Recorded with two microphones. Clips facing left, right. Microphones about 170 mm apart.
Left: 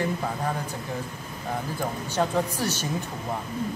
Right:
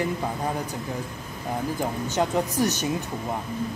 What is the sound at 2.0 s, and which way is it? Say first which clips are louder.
Speech: even; 20° right (ahead or behind).